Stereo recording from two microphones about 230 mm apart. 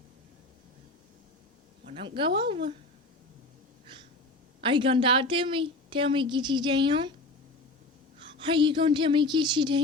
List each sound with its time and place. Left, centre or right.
1.8 s a woman's voice: right
4.6 s a woman's voice: right
8.2 s a woman's voice: right